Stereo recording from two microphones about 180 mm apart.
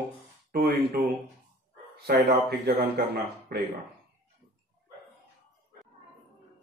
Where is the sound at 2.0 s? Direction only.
60° right (ahead or behind).